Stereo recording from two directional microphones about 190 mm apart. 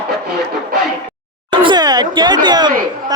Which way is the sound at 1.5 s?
25° right (ahead or behind).